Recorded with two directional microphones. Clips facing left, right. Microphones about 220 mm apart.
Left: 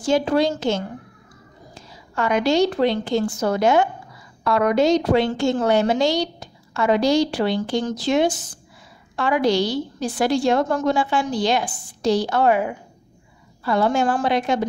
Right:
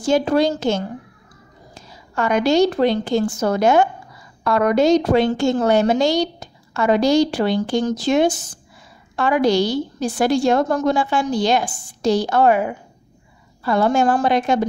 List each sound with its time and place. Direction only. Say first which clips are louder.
0.0 s a woman's voice: right 2 dB; 45° right (ahead or behind)
2.1 s a woman's voice: right 2 dB; 45° right (ahead or behind)
13.7 s a woman's voice: right 3 dB; 45° right (ahead or behind)